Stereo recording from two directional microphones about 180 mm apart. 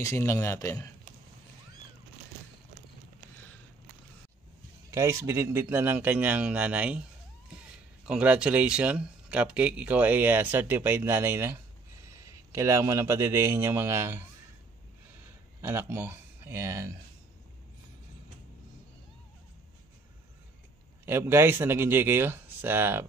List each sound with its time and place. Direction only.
0.0 s a man's voice: 15° left (ahead or behind)
4.9 s speech: 15° right (ahead or behind)
8.0 s speech: 5° right (ahead or behind)
15.6 s speech: 10° right (ahead or behind)
21.0 s speech: 15° right (ahead or behind)